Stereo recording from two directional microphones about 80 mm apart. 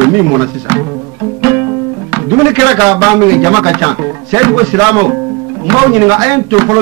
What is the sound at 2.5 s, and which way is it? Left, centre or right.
Speech, right.